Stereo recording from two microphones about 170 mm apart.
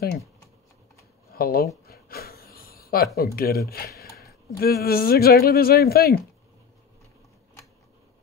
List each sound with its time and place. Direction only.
1.3 s speech: 60° left (ahead or behind)
1.9 s a sound: 65° left (ahead or behind)
3.2 s speech: 65° left (ahead or behind)